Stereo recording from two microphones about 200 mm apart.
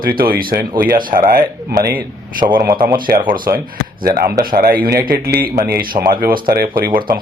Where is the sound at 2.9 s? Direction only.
45° right (ahead or behind).